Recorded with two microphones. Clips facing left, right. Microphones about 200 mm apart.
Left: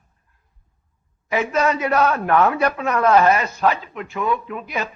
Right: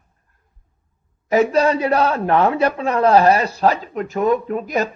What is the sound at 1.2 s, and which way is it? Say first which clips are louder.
A woman's voice: right 5 dB; 40° right (ahead or behind).